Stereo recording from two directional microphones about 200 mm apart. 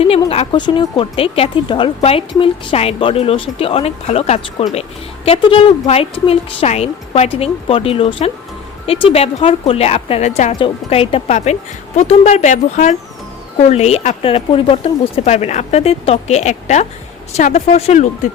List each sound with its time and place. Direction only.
0.3 s a woman's voice: 25° left (ahead or behind)